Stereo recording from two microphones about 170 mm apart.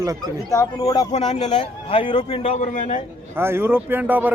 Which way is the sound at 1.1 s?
35° left (ahead or behind).